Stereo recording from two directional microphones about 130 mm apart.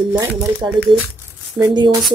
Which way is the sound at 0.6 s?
25° right (ahead or behind).